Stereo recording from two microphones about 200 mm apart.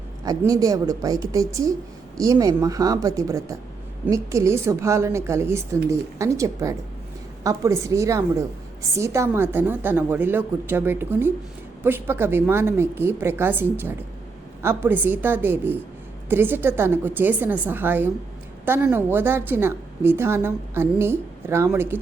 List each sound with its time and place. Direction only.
0.3 s a woman's voice: 20° right (ahead or behind)